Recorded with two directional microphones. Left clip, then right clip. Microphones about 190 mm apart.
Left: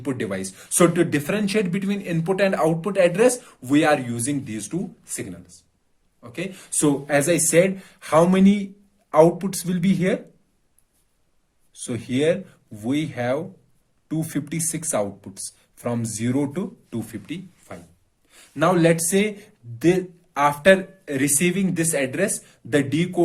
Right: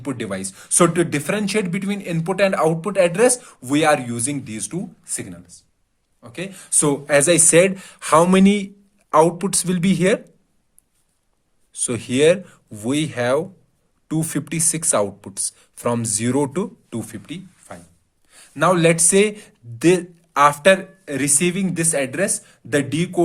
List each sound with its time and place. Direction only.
0.0 s speech: 25° right (ahead or behind); by 10.2 s 45° right (ahead or behind)
11.7 s speech: 45° right (ahead or behind)